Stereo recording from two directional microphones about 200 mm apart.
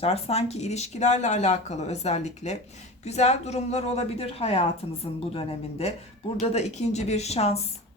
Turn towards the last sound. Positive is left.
turn(degrees=30)  # may be behind; listen again after turning